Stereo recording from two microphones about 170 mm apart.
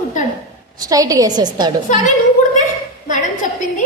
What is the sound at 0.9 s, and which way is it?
Speech, 20° right (ahead or behind).